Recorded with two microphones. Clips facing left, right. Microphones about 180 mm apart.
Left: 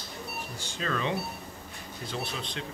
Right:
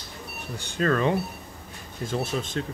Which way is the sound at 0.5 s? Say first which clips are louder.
Right 9 dB; 55° right (ahead or behind).